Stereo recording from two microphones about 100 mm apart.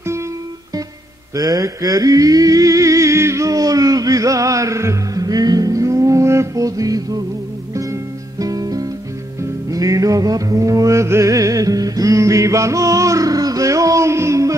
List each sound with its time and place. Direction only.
1.3 s music: 40° right (ahead or behind)